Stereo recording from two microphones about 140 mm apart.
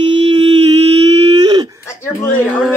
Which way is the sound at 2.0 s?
20° left (ahead or behind).